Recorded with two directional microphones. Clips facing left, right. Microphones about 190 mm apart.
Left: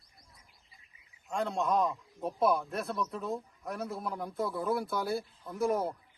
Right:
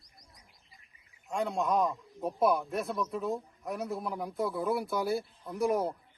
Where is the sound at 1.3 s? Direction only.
Centre (ahead or behind).